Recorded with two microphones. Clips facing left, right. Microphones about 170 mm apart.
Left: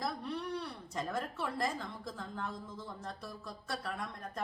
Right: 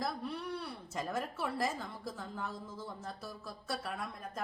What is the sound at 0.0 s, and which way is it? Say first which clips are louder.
A woman's voice: even; centre (ahead or behind).